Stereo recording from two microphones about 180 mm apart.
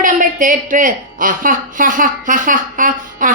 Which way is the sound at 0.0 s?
45° right (ahead or behind).